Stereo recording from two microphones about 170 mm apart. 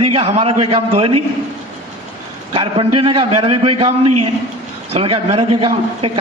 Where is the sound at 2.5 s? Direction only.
30° right (ahead or behind).